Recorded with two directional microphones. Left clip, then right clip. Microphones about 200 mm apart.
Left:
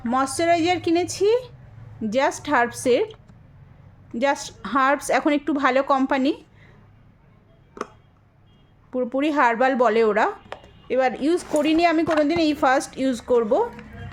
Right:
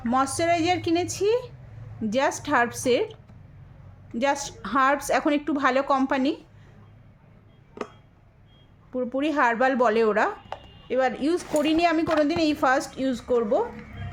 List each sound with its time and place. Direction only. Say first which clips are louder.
0.0 s speech: left 2 dB; 20° left (ahead or behind)
4.2 s speech: left 2 dB; 20° left (ahead or behind)
8.9 s speech: left 3 dB; 25° left (ahead or behind)